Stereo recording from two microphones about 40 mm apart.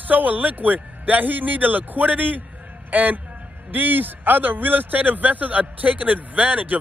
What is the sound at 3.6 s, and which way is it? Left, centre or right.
A man's voice, right.